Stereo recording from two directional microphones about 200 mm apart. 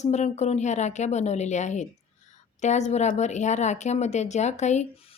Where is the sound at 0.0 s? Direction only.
35° left (ahead or behind).